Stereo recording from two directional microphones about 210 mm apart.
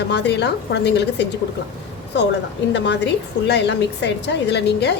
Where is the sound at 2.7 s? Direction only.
55° left (ahead or behind).